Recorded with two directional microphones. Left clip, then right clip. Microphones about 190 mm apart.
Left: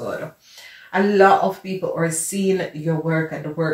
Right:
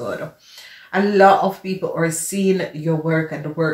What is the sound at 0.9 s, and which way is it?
Speech, 25° right (ahead or behind).